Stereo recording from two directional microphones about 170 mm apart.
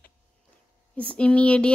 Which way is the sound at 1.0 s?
5° left (ahead or behind).